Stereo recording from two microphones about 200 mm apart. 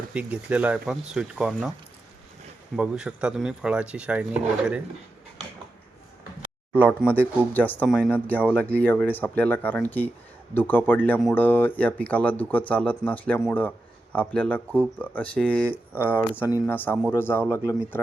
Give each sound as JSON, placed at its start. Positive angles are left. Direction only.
{"t": 0.1, "sound": "speech", "side_deg": -5}
{"t": 2.7, "sound": "speech", "side_deg": -5}
{"t": 6.7, "sound": "speech", "side_deg": -10}
{"t": 7.5, "sound": "speech", "side_deg": 10}
{"t": 16.0, "sound": "speech", "side_deg": -10}
{"t": 16.5, "sound": "speech", "side_deg": 15}